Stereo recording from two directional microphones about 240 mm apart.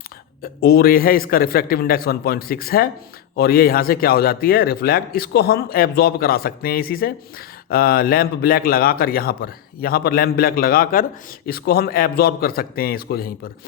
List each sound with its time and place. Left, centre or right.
0.4 s a man's voice: left